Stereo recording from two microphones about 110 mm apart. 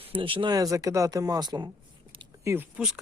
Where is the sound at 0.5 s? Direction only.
30° right (ahead or behind).